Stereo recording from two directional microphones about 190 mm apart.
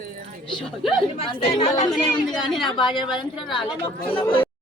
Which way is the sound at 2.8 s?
25° left (ahead or behind).